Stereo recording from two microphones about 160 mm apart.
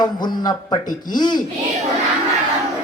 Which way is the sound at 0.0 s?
25° left (ahead or behind).